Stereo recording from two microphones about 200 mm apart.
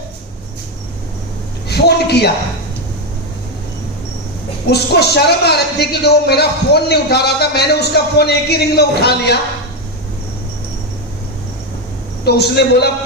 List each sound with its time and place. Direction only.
1.7 s a sound: 55° left (ahead or behind)
4.7 s speech: 55° left (ahead or behind)
12.2 s a man's voice: 55° left (ahead or behind)